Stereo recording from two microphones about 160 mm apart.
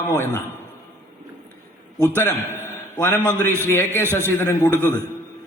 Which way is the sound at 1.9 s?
15° left (ahead or behind).